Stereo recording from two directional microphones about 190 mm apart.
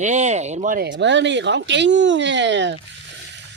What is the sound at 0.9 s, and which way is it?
Speech, 70° right (ahead or behind).